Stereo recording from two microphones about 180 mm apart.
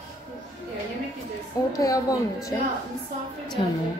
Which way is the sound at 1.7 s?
20° left (ahead or behind).